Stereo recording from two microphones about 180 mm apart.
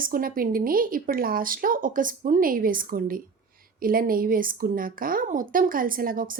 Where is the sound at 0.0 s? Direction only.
50° right (ahead or behind).